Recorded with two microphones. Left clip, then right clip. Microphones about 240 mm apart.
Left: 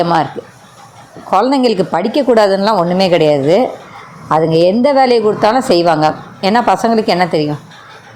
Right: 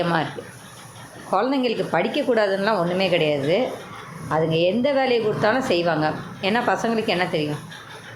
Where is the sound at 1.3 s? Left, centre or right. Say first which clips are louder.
Left 10 dB; left.